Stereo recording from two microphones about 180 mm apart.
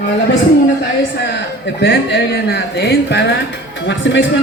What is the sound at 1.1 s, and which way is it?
A woman's voice, 75° left (ahead or behind).